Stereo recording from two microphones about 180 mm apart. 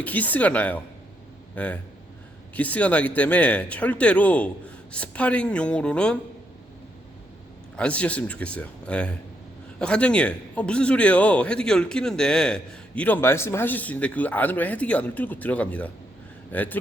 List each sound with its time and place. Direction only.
0.0 s a man's voice: 10° left (ahead or behind)
7.8 s a man's voice: 5° left (ahead or behind)